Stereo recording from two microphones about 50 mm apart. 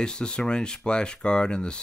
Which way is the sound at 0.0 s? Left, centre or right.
Centre.